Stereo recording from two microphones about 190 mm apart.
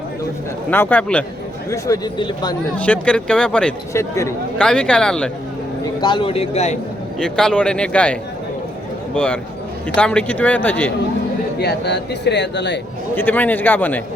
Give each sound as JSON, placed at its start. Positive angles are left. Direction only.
{"t": 0.7, "sound": "speech", "side_deg": 10}
{"t": 1.7, "sound": "speech", "side_deg": 20}
{"t": 2.7, "sound": "speech", "side_deg": 5}
{"t": 4.5, "sound": "speech", "side_deg": 5}
{"t": 6.0, "sound": "a man's voice", "side_deg": 25}
{"t": 7.2, "sound": "speech", "side_deg": 5}
{"t": 11.6, "sound": "speech", "side_deg": 60}
{"t": 13.1, "sound": "speech", "side_deg": 10}